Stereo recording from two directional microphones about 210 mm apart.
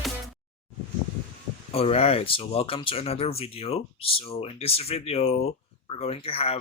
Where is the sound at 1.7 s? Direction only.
30° left (ahead or behind).